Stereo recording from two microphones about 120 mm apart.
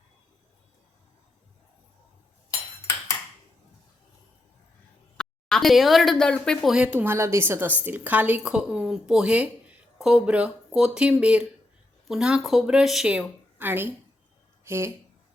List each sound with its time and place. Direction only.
5.1 s a woman's voice: 5° left (ahead or behind)
6.7 s a woman's voice: 10° right (ahead or behind)